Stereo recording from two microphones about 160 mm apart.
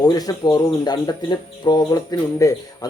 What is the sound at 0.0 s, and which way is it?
Speech, 25° left (ahead or behind).